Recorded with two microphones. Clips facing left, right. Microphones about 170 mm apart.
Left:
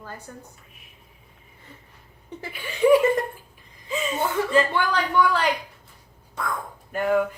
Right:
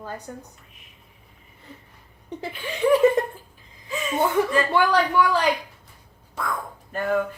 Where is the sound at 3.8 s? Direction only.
25° left (ahead or behind).